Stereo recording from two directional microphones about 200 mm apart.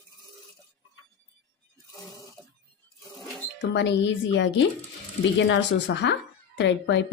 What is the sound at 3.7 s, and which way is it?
A woman's voice, 60° left (ahead or behind).